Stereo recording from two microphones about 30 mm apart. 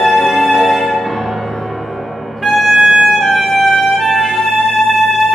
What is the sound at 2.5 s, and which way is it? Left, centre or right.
Music, centre.